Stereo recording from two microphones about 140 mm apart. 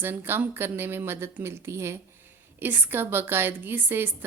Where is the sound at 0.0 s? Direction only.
15° right (ahead or behind).